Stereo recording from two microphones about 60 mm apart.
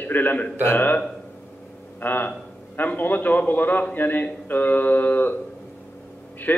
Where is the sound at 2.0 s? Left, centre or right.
Left.